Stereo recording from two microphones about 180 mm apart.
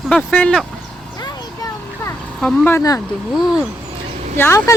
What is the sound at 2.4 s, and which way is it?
Speech, 10° left (ahead or behind).